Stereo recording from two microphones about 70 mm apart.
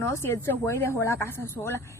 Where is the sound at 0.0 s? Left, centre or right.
Left.